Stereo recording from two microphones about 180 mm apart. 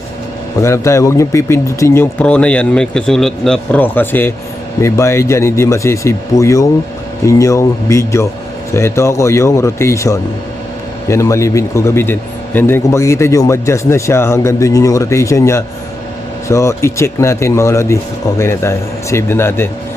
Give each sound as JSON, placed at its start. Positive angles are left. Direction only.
{"t": 0.6, "sound": "speech", "side_deg": 15}